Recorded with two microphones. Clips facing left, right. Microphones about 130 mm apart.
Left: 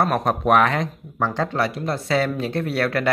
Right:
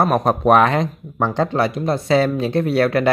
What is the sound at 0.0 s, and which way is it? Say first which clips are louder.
Speech: right 4 dB; 25° right (ahead or behind).